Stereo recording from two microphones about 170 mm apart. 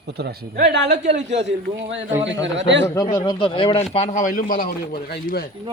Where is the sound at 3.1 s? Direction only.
25° left (ahead or behind); by 5.5 s 60° left (ahead or behind).